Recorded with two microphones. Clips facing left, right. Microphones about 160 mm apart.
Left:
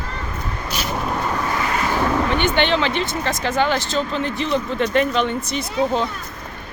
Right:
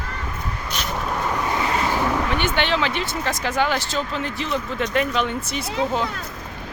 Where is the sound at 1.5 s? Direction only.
20° right (ahead or behind).